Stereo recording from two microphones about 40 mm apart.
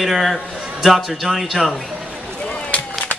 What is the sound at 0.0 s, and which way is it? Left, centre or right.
Speech, centre.